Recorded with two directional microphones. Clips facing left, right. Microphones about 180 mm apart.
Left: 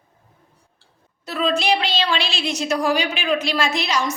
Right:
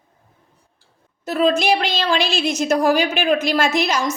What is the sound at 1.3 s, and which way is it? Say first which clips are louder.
A woman's voice: right 4 dB; 50° right (ahead or behind).